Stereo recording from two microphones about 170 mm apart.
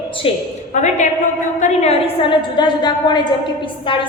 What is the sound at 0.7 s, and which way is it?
A woman's voice, 45° left (ahead or behind).